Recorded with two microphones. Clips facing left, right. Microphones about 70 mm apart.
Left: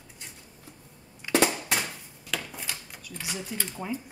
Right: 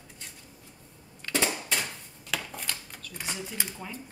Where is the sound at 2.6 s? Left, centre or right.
Centre.